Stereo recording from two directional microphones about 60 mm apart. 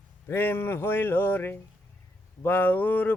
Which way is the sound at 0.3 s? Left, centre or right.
Left.